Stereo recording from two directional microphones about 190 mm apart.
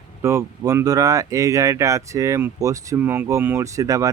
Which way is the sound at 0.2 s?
15° right (ahead or behind).